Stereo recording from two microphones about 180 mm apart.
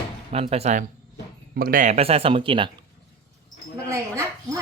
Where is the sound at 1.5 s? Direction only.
50° right (ahead or behind); by 2.7 s 30° right (ahead or behind).